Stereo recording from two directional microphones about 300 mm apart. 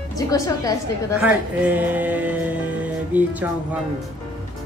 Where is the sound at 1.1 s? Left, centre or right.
Centre.